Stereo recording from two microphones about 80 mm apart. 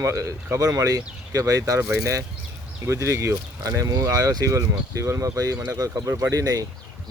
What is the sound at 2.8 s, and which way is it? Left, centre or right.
Speech, right.